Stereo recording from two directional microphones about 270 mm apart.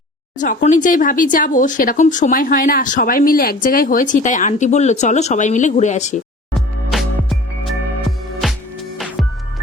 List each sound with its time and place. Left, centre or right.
0.3 s speech: left
6.9 s music: centre
9.2 s music: centre